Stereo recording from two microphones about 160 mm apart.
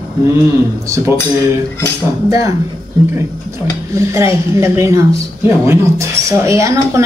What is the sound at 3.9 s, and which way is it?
Speech, 20° right (ahead or behind).